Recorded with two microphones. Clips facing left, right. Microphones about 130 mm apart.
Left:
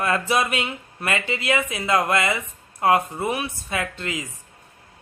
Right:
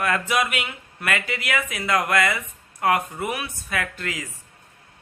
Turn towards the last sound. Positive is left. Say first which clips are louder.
# left 1 dB
turn(degrees=20)  # may be behind; listen again after turning